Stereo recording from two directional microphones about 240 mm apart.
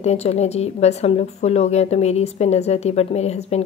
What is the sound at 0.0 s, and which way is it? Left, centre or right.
A woman's voice, left.